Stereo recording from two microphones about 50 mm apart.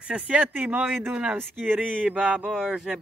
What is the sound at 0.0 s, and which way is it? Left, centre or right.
Speech, right.